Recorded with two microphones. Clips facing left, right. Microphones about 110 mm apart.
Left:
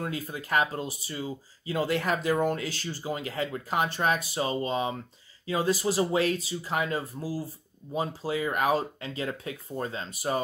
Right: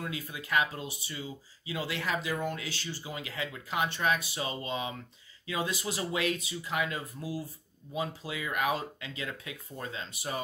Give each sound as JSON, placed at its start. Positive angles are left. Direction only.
{"t": 0.0, "sound": "speech", "side_deg": 40}